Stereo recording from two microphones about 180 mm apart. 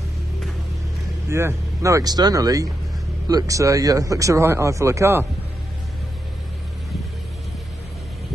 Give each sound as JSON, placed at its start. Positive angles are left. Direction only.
{"t": 1.3, "sound": "speech", "side_deg": -15}